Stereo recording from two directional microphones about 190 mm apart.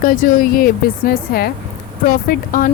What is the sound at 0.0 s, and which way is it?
Speech, 50° left (ahead or behind).